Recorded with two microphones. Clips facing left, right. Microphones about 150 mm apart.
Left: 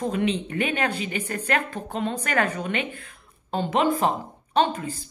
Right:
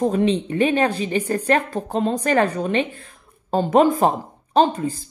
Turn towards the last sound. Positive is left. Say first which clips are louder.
# right 5 dB
turn(degrees=-35)  # may be behind; listen again after turning